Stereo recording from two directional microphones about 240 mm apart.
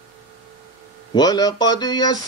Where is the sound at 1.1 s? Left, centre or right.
Centre.